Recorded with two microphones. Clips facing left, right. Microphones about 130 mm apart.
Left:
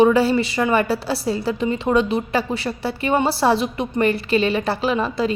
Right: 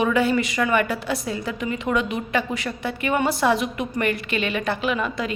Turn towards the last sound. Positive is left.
turn(degrees=30)  # may be behind; listen again after turning